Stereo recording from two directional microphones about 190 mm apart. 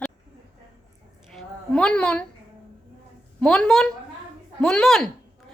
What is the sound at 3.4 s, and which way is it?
A woman's voice, 5° left (ahead or behind).